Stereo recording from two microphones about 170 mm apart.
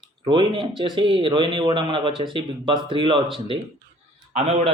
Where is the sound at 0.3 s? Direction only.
30° right (ahead or behind).